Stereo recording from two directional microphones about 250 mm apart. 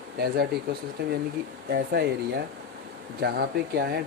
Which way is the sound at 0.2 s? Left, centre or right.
Right.